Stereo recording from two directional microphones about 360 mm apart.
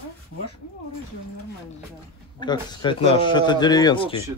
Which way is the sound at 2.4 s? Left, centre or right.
Centre.